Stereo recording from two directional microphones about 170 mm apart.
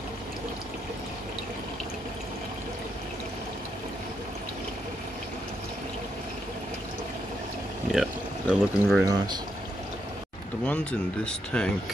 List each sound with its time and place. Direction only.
7.9 s speech: centre (ahead or behind)
9.0 s speech: 25° right (ahead or behind)
10.6 s speech: 10° left (ahead or behind)